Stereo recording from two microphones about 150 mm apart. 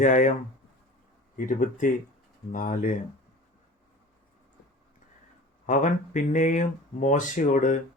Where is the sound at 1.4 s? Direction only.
65° left (ahead or behind).